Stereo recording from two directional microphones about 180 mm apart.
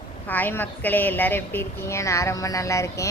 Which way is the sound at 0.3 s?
10° left (ahead or behind).